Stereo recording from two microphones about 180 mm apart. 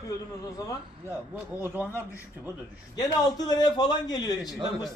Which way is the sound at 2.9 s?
20° left (ahead or behind).